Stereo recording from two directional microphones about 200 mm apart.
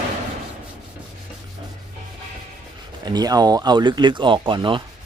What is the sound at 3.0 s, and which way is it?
Speech, 20° right (ahead or behind).